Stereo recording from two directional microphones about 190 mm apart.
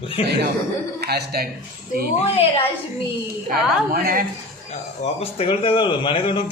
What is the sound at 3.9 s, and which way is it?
Speech, 50° right (ahead or behind).